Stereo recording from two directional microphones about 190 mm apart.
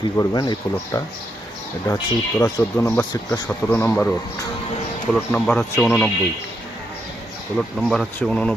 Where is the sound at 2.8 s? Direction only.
10° left (ahead or behind).